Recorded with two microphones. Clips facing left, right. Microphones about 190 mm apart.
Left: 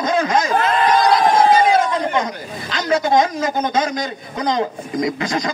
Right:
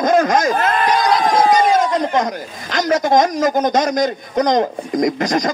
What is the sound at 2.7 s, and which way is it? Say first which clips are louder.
A man's voice: right 2 dB; 45° right (ahead or behind).